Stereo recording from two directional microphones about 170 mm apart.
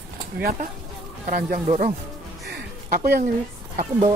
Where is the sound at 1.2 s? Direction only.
45° right (ahead or behind).